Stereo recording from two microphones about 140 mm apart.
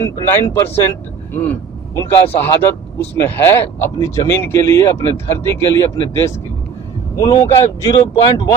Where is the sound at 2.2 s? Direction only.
15° left (ahead or behind).